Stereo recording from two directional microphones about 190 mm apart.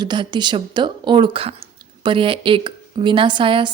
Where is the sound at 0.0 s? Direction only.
25° right (ahead or behind).